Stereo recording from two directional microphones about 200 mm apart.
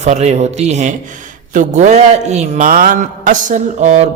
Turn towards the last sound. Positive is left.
turn(degrees=-35)  # may be behind; listen again after turning